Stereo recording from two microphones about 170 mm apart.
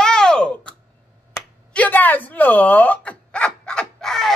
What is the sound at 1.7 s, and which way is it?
Speech, 10° left (ahead or behind).